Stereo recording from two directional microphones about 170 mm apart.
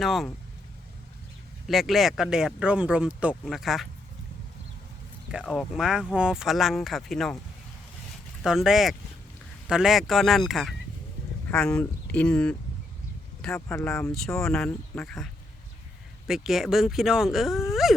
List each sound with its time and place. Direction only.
0.0 s speech: centre (ahead or behind)
1.6 s speech: centre (ahead or behind)
5.3 s speech: 5° right (ahead or behind)
8.4 s speech: centre (ahead or behind)
13.7 s speech: 15° left (ahead or behind)
14.4 s speech: 5° left (ahead or behind)